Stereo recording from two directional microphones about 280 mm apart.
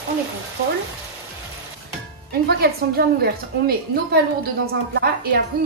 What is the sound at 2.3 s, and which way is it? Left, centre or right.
Speech, right.